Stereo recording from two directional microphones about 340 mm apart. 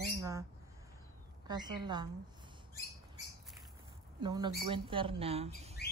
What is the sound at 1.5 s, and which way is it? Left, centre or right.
Speech, centre.